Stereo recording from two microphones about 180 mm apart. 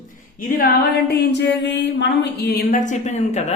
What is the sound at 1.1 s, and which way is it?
Speech, 75° left (ahead or behind).